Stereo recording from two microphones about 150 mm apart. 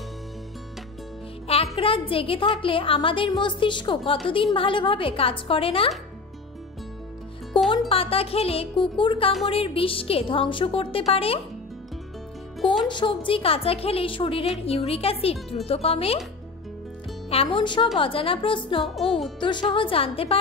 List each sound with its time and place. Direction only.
1.5 s a woman's voice: 40° left (ahead or behind)
7.5 s music: 35° left (ahead or behind)
7.9 s a woman's voice: 40° left (ahead or behind)
12.8 s a woman's voice: 30° left (ahead or behind)
17.3 s a woman's voice: 35° left (ahead or behind)